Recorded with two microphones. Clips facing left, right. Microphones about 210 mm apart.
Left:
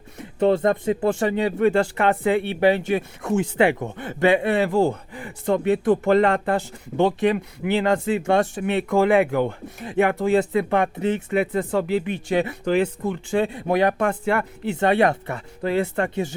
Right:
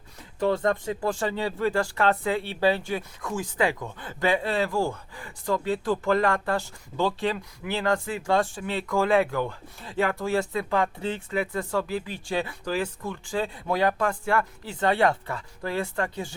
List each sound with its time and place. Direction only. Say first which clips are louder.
0.4 s speech: left 6 dB; 20° left (ahead or behind)
3.4 s speech: left 5 dB; 65° left (ahead or behind)
3.9 s speech: left 6 dB; 25° left (ahead or behind)
5.1 s a sound: left 6 dB; 20° left (ahead or behind)
5.6 s speech: left 7 dB; 20° left (ahead or behind)